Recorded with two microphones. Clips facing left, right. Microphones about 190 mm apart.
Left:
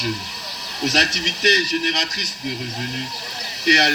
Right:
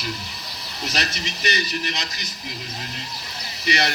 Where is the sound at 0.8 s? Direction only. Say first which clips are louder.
Left 6 dB; 80° left.